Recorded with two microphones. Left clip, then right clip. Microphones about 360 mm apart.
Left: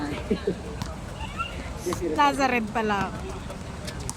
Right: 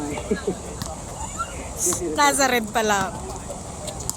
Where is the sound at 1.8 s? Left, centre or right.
Centre.